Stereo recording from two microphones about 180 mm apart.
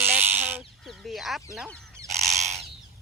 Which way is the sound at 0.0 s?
10° right (ahead or behind).